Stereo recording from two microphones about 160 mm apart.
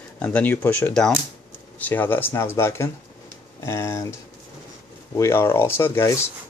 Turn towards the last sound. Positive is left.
turn(degrees=15)  # may be behind; listen again after turning